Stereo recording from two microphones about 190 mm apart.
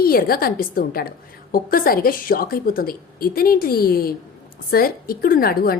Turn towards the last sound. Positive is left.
turn(degrees=50)  # may be behind; listen again after turning